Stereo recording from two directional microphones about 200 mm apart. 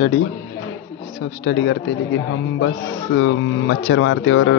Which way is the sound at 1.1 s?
70° left (ahead or behind).